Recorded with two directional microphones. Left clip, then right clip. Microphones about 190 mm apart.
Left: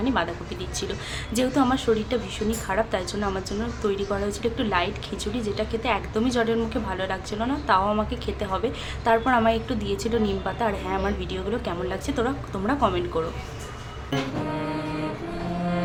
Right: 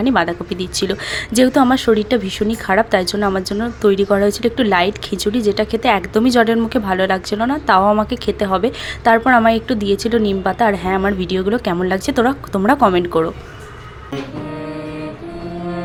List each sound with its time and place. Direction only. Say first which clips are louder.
0.0 s speech: right 9 dB; 40° right (ahead or behind)